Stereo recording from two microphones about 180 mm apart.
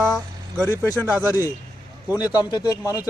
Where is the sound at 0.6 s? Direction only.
10° left (ahead or behind).